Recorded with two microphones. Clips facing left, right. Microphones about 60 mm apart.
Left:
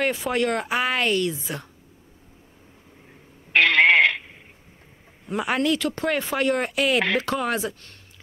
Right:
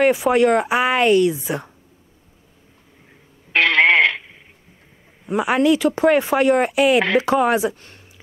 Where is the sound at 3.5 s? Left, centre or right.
Right.